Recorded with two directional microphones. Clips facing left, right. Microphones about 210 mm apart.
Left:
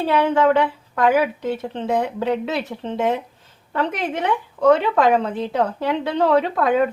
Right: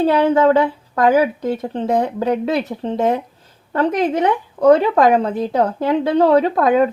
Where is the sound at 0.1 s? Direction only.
35° right (ahead or behind).